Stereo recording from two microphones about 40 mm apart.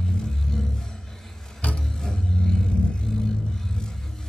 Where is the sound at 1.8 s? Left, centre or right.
Centre.